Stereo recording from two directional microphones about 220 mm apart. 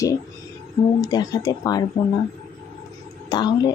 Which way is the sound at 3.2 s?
15° left (ahead or behind).